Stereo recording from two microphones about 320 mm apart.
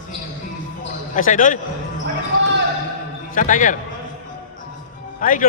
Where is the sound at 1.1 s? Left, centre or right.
Left.